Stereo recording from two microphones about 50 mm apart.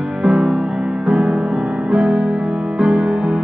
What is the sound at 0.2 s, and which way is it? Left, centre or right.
Music, centre.